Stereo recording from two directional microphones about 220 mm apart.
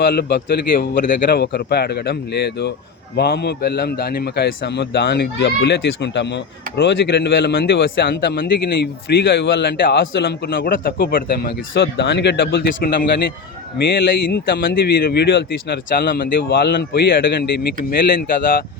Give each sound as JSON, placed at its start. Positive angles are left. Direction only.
{"t": 0.0, "sound": "a man's voice", "side_deg": 45}